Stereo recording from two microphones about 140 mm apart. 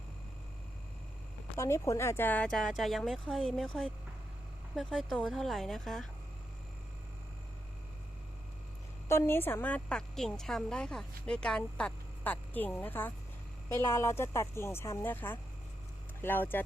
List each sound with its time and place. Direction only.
1.5 s speech: 20° left (ahead or behind); by 6.1 s centre (ahead or behind)
9.0 s a woman's voice: 20° left (ahead or behind)